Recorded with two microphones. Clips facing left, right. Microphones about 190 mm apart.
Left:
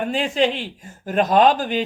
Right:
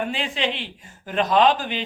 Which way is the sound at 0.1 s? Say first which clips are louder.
Left 6 dB; 45° left (ahead or behind).